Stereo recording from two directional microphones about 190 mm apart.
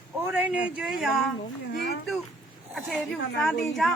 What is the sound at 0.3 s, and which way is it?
Speech, 10° right (ahead or behind).